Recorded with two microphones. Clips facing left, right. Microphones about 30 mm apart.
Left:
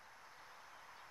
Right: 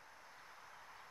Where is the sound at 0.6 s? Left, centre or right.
Centre.